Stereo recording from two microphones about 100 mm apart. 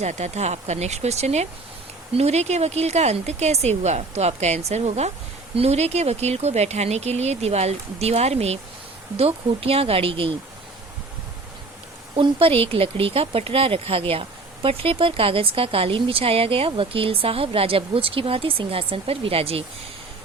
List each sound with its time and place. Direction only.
0.0 s speech: 90° right
9.1 s speech: 75° right (ahead or behind)
12.1 s speech: 65° right (ahead or behind)